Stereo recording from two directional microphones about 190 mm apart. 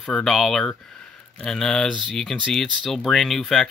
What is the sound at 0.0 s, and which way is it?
Speech, centre (ahead or behind).